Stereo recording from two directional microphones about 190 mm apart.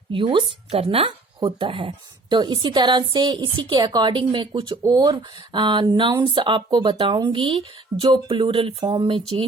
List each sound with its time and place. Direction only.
0.1 s a woman's voice: 25° right (ahead or behind)